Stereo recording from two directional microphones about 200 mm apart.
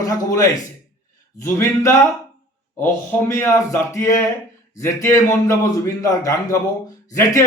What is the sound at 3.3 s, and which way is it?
A man's voice, 15° left (ahead or behind).